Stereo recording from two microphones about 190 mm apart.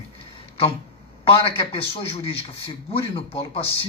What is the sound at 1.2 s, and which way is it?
Speech, 30° left (ahead or behind).